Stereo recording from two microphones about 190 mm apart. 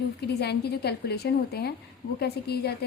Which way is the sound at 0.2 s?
60° left (ahead or behind).